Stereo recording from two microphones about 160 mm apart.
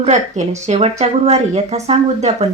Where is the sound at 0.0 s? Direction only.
45° right (ahead or behind).